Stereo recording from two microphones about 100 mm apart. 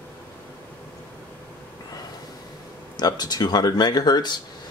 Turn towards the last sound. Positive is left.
turn(degrees=45)  # may be behind; listen again after turning